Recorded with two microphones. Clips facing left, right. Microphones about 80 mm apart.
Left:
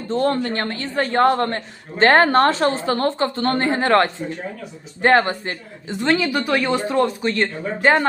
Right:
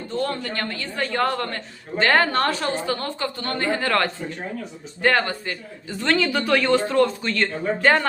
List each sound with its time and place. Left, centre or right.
0.1 s a man's voice: left; by 8.0 s centre